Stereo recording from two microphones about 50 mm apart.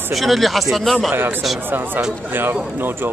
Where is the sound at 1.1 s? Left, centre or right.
Right.